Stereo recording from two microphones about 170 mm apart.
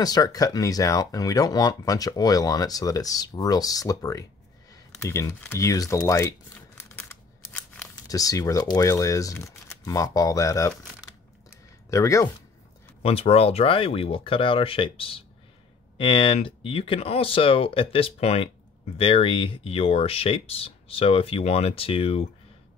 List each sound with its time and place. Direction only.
0.0 s speech: 20° left (ahead or behind)
4.6 s a sound: 20° left (ahead or behind)
8.1 s speech: 20° left (ahead or behind)
11.9 s speech: 20° left (ahead or behind)
13.0 s speech: 35° left (ahead or behind)